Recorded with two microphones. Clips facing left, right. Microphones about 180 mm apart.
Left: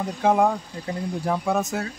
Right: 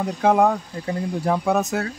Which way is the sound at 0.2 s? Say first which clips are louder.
Right 2 dB; 70° right (ahead or behind).